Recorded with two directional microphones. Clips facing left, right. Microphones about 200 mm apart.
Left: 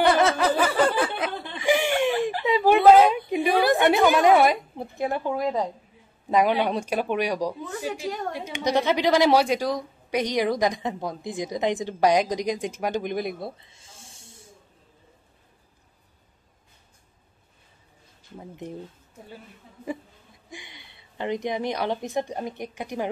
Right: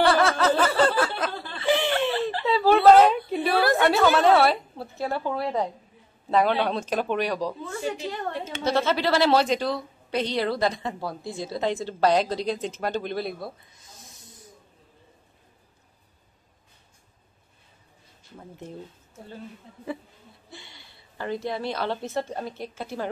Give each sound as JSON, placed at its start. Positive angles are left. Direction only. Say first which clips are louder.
{"t": 0.0, "sound": "snicker", "louder": "left 1 dB", "side_deg": 20}
{"t": 3.3, "sound": "a sound", "louder": "left 2 dB", "side_deg": 15}
{"t": 6.2, "sound": "speech", "louder": "left 1 dB", "side_deg": 15}
{"t": 18.4, "sound": "speech", "louder": "left 3 dB", "side_deg": 15}
{"t": 20.4, "sound": "a woman's voice", "louder": "left 4 dB", "side_deg": 15}